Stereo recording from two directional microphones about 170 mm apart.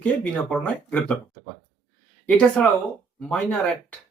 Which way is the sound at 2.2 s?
10° left (ahead or behind).